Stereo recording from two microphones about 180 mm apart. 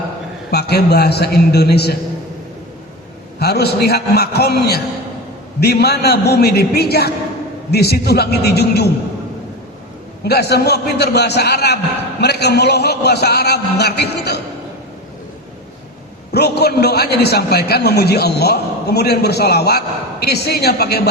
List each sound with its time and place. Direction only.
0.5 s a man's voice: 65° left (ahead or behind)
3.3 s a man's voice: 60° left (ahead or behind)
10.2 s a man's voice: 65° left (ahead or behind)
16.3 s a man's voice: 65° left (ahead or behind)